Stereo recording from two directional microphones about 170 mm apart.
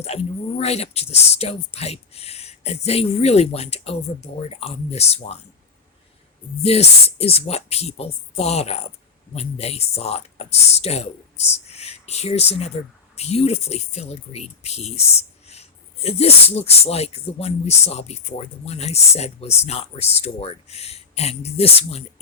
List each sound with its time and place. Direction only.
0.6 s speech: 40° left (ahead or behind)
6.6 s speech: 40° left (ahead or behind)